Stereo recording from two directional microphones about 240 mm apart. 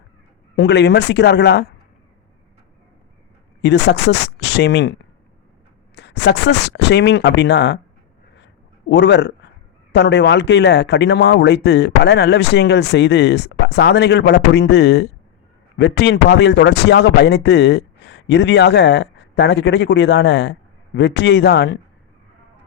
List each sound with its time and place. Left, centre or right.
0.5 s speech: left
3.6 s speech: left
8.9 s speech: left